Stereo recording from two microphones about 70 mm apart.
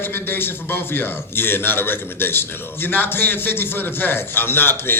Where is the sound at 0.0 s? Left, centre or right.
Left.